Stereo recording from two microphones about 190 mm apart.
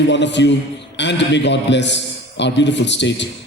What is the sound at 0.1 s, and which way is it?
A man's voice, 70° left (ahead or behind).